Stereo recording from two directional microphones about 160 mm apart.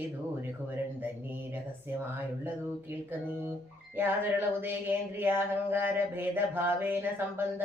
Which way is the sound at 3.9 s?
15° right (ahead or behind).